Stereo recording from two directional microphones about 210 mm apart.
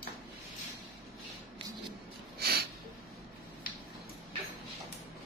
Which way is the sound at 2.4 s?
50° right (ahead or behind).